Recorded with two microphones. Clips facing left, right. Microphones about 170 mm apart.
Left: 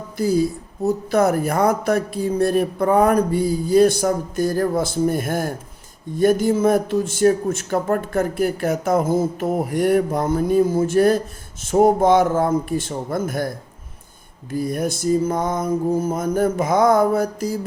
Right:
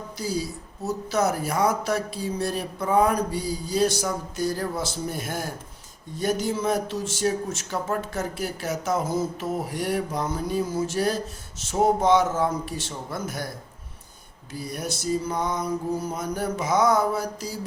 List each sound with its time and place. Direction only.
0.2 s speech: 55° left (ahead or behind)
14.5 s speech: 50° left (ahead or behind)